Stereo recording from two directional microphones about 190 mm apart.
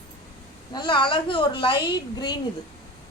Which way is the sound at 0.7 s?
25° left (ahead or behind).